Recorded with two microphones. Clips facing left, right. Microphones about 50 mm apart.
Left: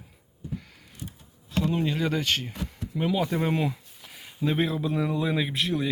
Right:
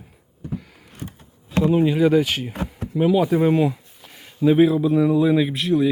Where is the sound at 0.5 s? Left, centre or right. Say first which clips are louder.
Right 6 dB; centre.